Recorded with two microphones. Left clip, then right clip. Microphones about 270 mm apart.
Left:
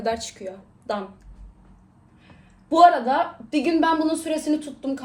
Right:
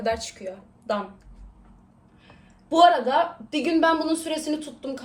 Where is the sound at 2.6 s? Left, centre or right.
Centre.